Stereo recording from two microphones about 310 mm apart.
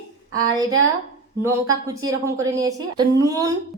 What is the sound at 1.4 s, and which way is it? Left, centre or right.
A woman's voice, centre.